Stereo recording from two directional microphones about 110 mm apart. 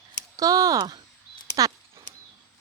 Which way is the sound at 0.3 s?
35° right (ahead or behind).